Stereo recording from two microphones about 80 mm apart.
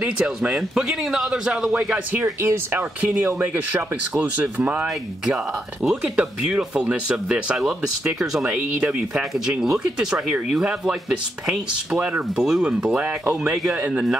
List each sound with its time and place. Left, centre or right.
0.0 s a man's voice: centre
2.4 s speech: right
3.0 s a man's voice: centre
4.8 s a man's voice: centre